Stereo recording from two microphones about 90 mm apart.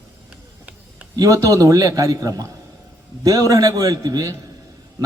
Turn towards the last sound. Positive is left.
turn(degrees=-45)  # may be behind; listen again after turning